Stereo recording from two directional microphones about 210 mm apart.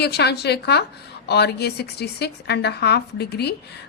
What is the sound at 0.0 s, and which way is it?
Speech, 50° left (ahead or behind).